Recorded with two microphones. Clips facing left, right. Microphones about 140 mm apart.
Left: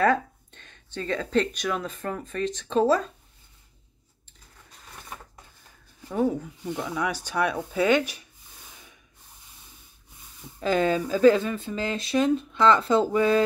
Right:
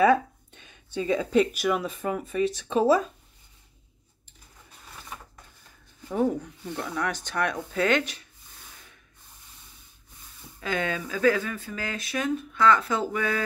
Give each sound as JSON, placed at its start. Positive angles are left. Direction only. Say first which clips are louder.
{"t": 0.0, "sound": "speech", "louder": "right 2 dB", "side_deg": -10}
{"t": 6.2, "sound": "speech", "louder": "left 2 dB", "side_deg": 5}
{"t": 10.6, "sound": "speech", "louder": "left 6 dB", "side_deg": 35}